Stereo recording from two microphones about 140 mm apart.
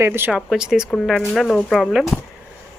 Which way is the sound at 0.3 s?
5° right (ahead or behind).